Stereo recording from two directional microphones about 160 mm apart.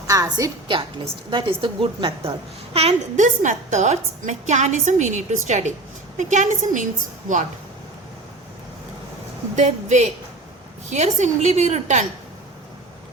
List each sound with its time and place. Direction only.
0.1 s a woman's voice: 20° right (ahead or behind)
2.7 s a woman's voice: 45° right (ahead or behind)
9.6 s a woman's voice: 45° right (ahead or behind)